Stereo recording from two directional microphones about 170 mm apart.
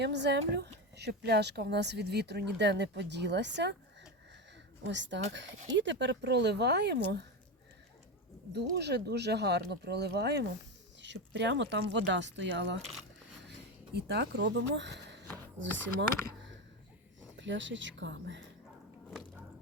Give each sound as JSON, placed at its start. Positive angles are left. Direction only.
{"t": 0.0, "sound": "speech", "side_deg": -85}
{"t": 4.8, "sound": "speech", "side_deg": -90}
{"t": 8.7, "sound": "speech", "side_deg": -80}
{"t": 11.0, "sound": "speech", "side_deg": -90}
{"t": 13.9, "sound": "speech", "side_deg": -75}
{"t": 17.3, "sound": "speech", "side_deg": -90}